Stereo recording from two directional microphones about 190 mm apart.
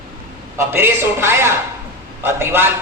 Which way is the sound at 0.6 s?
10° right (ahead or behind).